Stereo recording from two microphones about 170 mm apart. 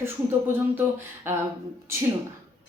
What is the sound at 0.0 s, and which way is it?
A woman's voice, 15° right (ahead or behind).